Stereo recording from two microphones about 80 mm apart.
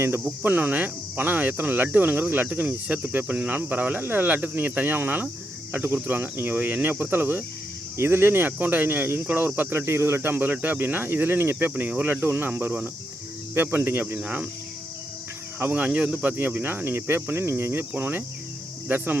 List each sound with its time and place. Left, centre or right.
0.3 s cricket: centre
15.5 s cricket: right